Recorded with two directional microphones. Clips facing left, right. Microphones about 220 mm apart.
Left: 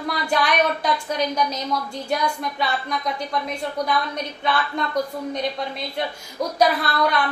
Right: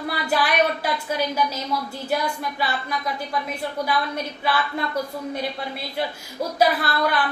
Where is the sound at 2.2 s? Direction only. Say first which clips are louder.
Left 2 dB; 5° right (ahead or behind).